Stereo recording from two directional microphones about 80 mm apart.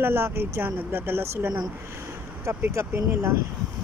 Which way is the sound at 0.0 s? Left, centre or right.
Right.